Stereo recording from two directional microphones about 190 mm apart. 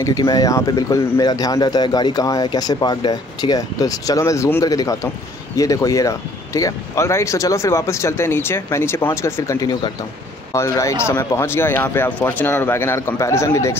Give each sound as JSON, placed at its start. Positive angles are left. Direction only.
{"t": 0.0, "sound": "speech", "side_deg": 20}